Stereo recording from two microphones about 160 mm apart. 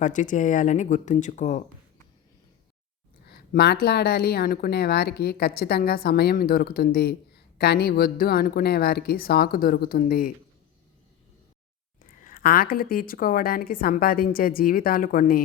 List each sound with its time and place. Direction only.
0.0 s speech: 50° left (ahead or behind)
3.2 s speech: 85° left; by 10.3 s 60° left (ahead or behind)
12.2 s a woman's voice: 65° left (ahead or behind)